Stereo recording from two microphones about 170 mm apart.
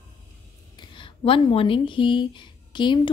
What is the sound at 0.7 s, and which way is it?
A woman's voice, 30° left (ahead or behind).